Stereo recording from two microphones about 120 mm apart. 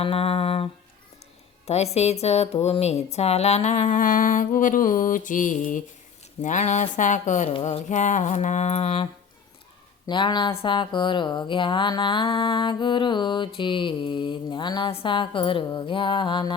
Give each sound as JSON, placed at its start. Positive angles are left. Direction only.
{"t": 0.0, "sound": "speech", "side_deg": 55}
{"t": 7.6, "sound": "mantra", "side_deg": 80}
{"t": 10.1, "sound": "speech", "side_deg": 40}